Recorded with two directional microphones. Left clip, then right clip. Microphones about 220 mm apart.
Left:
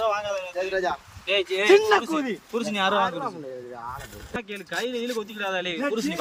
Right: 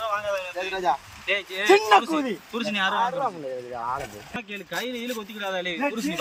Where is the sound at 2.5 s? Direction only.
50° left (ahead or behind).